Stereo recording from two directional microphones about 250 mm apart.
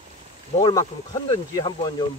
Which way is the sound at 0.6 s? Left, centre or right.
Centre.